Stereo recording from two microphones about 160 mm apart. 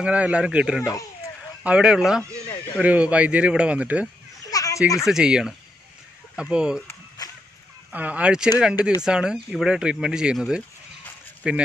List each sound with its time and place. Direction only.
0.0 s speech: 5° right (ahead or behind)
2.4 s a sound: 20° left (ahead or behind)
2.8 s speech: 10° right (ahead or behind)
4.5 s children playing: 20° left (ahead or behind)
5.0 s speech: 5° right (ahead or behind)
7.9 s speech: 10° right (ahead or behind)